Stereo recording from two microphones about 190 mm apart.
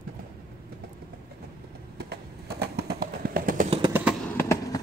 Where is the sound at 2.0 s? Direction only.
60° right (ahead or behind).